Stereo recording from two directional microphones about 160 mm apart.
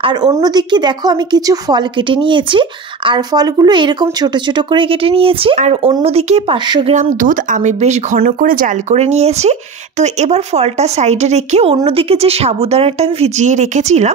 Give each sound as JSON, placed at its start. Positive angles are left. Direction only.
{"t": 0.0, "sound": "speech", "side_deg": -25}
{"t": 6.9, "sound": "speech", "side_deg": -50}
{"t": 8.2, "sound": "speech", "side_deg": -60}
{"t": 8.9, "sound": "speech", "side_deg": -40}